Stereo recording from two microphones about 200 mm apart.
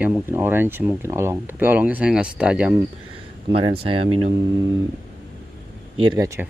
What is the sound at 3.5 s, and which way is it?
Speech, 25° right (ahead or behind).